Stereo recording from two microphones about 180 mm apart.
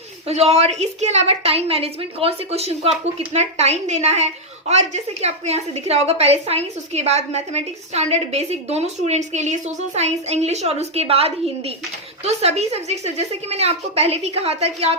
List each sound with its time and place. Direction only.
0.3 s a woman's voice: 35° right (ahead or behind)